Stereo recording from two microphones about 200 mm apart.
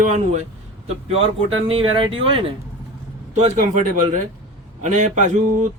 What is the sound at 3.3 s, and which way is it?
Speech, 35° right (ahead or behind).